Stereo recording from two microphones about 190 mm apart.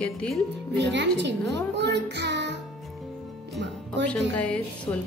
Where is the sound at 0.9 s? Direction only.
65° right (ahead or behind).